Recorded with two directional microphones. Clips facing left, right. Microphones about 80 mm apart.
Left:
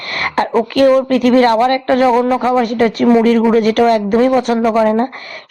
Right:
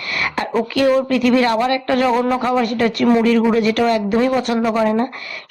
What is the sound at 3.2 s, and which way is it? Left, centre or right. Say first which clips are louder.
A woman's voice: left 4 dB; left.